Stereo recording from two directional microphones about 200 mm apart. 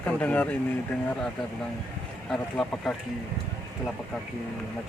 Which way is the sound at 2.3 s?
5° left (ahead or behind).